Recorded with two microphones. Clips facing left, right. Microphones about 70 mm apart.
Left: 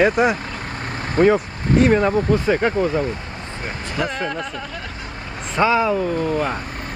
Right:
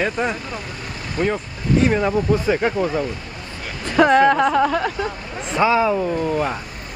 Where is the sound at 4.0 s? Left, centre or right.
Right.